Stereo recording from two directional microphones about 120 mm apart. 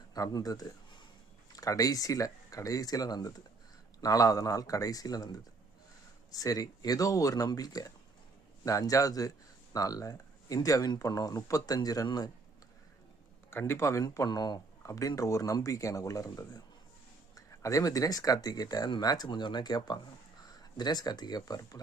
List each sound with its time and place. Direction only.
0.1 s speech: 35° left (ahead or behind)
13.5 s speech: 20° left (ahead or behind)